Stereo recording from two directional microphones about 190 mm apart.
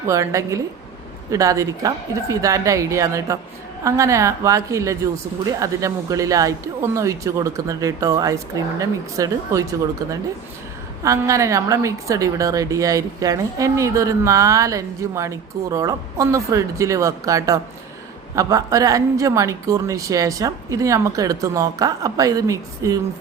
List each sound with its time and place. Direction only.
0.1 s a woman's voice: 15° right (ahead or behind)
11.0 s a woman's voice: 15° right (ahead or behind)